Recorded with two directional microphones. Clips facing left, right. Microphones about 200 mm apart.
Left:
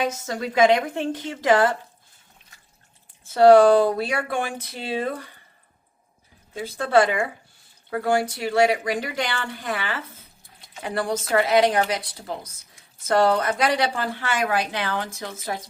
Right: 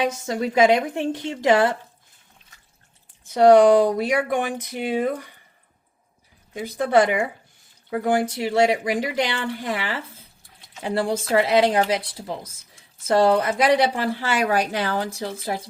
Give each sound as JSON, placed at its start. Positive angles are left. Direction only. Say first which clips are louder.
{"t": 0.3, "sound": "speech", "louder": "right 1 dB", "side_deg": -25}
{"t": 3.2, "sound": "speech", "louder": "even", "side_deg": -20}
{"t": 6.5, "sound": "speech", "louder": "right 1 dB", "side_deg": -15}
{"t": 14.2, "sound": "speech", "louder": "right 2 dB", "side_deg": -40}